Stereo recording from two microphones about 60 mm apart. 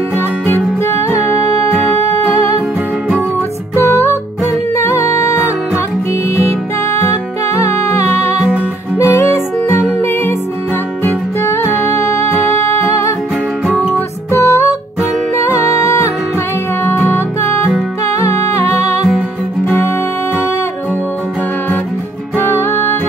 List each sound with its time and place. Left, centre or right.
0.8 s music: left
3.7 s music: left
7.1 s music: left
11.4 s music: left
22.4 s music: left